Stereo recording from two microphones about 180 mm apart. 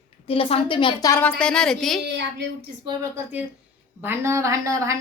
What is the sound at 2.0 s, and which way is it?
Speech, 70° right (ahead or behind).